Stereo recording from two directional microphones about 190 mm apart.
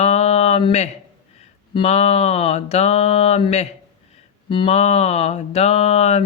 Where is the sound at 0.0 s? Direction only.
35° left (ahead or behind).